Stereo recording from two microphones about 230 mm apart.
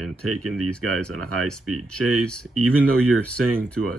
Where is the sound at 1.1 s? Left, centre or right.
Right.